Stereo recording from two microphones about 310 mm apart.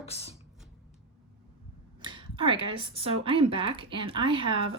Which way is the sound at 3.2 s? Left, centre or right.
Centre.